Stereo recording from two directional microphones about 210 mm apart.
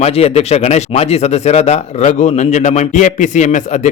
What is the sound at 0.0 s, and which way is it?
Speech, 30° left (ahead or behind).